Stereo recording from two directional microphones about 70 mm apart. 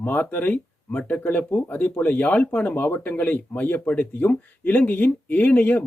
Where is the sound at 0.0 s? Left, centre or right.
Left.